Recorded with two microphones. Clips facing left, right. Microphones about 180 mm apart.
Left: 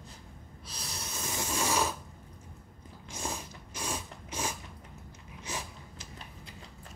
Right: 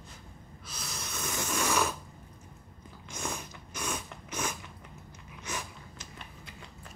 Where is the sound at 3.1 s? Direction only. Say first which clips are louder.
Even; 30° left (ahead or behind).